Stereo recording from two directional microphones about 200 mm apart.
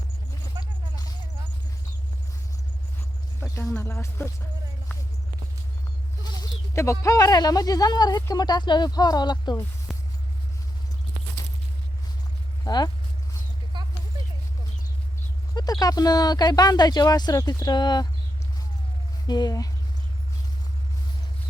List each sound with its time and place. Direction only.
0.6 s a sound: 15° right (ahead or behind)
3.8 s speech: 10° left (ahead or behind)
6.7 s speech: 15° left (ahead or behind)
12.6 s speech: 20° left (ahead or behind)
13.7 s a sound: 25° right (ahead or behind)
15.5 s speech: 20° left (ahead or behind)
19.3 s speech: 20° left (ahead or behind)